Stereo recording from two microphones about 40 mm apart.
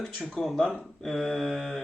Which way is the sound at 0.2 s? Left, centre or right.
Centre.